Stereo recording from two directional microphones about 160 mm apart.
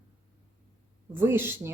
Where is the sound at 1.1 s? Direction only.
15° right (ahead or behind).